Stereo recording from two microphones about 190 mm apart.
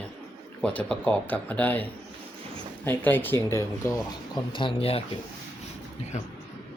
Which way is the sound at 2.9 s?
10° left (ahead or behind).